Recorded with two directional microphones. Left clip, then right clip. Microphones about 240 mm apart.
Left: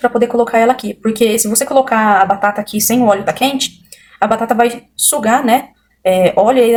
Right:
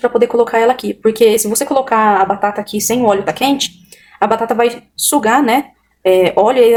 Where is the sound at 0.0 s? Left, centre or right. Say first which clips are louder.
Right 1 dB; centre.